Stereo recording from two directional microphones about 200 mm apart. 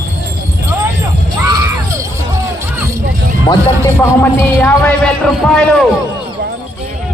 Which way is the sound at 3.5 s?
15° left (ahead or behind).